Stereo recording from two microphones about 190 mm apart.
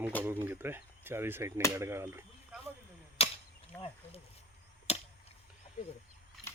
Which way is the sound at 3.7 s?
10° left (ahead or behind).